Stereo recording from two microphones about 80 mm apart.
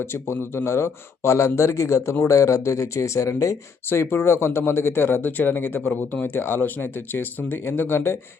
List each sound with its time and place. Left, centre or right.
0.0 s speech: left
3.8 s speech: left